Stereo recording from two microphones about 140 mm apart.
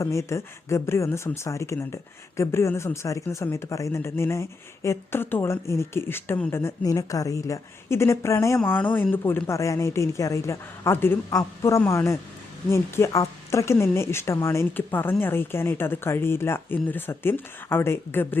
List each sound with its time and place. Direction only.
0.0 s speech: 20° left (ahead or behind)